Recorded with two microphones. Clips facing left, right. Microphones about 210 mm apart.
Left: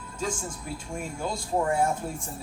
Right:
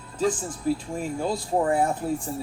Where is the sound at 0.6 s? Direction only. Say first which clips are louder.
Right 12 dB; 35° right (ahead or behind).